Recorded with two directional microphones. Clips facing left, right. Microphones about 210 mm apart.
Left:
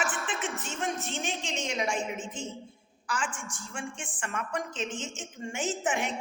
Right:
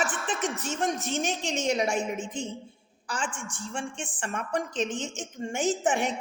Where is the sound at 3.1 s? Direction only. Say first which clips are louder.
Right 1 dB; 35° right (ahead or behind).